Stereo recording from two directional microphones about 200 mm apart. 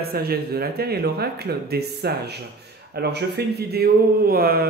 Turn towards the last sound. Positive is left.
turn(degrees=-50)  # may be behind; listen again after turning